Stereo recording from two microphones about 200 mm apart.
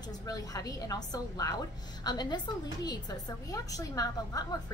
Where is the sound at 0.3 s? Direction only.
15° left (ahead or behind).